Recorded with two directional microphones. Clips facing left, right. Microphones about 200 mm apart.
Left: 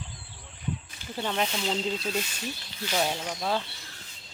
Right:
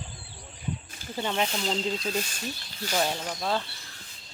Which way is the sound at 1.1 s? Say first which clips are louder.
Right 1 dB; 5° right (ahead or behind).